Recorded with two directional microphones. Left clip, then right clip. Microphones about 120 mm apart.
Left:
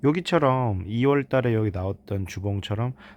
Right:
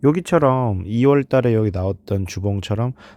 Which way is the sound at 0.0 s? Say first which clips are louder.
Right 5 dB; 40° right (ahead or behind).